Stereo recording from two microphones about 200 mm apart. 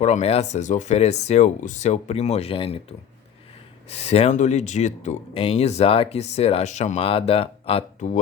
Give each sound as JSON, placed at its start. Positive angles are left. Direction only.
{"t": 0.0, "sound": "speech", "side_deg": 35}
{"t": 3.8, "sound": "speech", "side_deg": 30}